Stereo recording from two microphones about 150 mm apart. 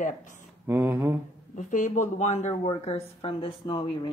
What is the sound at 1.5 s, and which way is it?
Speech, 55° left (ahead or behind).